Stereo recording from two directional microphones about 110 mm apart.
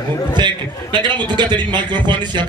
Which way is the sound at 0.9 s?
45° right (ahead or behind).